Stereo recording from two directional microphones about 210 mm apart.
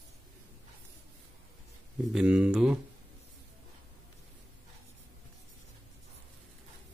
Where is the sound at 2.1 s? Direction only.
5° right (ahead or behind).